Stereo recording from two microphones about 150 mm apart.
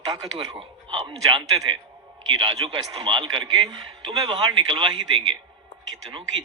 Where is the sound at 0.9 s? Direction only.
35° right (ahead or behind).